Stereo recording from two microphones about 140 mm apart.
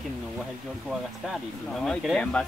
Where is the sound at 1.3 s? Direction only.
Centre (ahead or behind).